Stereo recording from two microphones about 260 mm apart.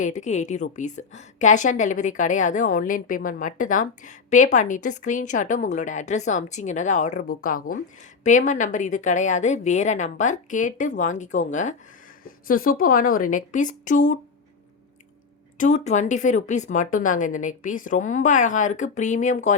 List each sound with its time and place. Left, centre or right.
0.0 s a woman's voice: left
15.5 s a woman's voice: left